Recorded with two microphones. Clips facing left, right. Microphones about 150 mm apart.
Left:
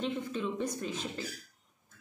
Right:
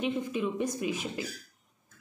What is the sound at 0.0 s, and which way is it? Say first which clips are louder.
A woman's voice: right 4 dB; 10° right (ahead or behind).